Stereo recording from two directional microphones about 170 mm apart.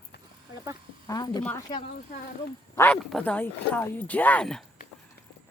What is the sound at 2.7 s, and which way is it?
Speech, 10° left (ahead or behind).